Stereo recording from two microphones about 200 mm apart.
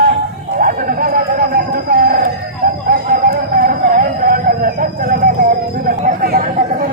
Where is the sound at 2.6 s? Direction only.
45° right (ahead or behind).